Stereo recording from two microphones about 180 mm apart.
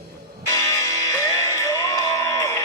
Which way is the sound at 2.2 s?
15° left (ahead or behind).